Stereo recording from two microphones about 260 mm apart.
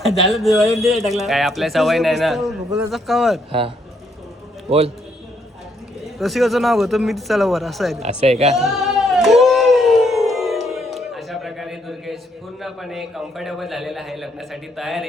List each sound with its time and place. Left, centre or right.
0.3 s a man's voice: centre
6.1 s a man's voice: centre
8.0 s a woman's voice: right
8.5 s a sound: centre
12.6 s a man's voice: centre